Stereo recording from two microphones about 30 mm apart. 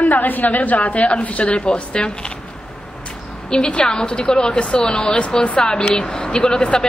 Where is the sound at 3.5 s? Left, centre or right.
Left.